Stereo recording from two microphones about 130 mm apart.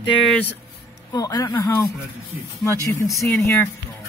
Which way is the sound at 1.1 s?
30° left (ahead or behind).